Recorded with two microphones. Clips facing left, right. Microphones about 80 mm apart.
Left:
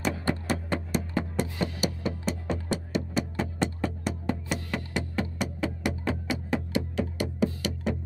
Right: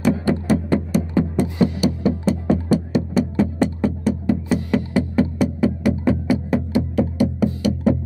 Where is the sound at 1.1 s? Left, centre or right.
Right.